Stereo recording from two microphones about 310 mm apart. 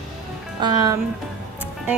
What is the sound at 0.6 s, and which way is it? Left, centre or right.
Speech, centre.